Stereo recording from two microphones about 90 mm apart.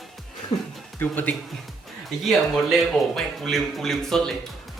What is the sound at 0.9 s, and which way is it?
Speech, 20° left (ahead or behind).